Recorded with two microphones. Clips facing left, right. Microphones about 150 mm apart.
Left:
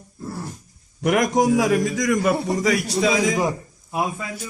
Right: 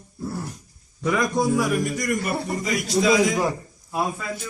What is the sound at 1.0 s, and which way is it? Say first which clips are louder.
A man's voice: left 4 dB; 85° left.